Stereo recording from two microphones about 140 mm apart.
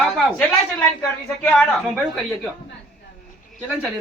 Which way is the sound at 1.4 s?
Centre (ahead or behind).